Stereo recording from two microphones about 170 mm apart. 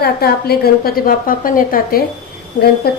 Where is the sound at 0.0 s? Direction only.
65° left (ahead or behind).